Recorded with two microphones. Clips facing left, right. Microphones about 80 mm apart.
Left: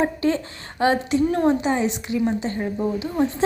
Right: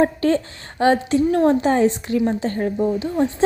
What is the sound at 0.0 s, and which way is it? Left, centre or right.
Speech, right.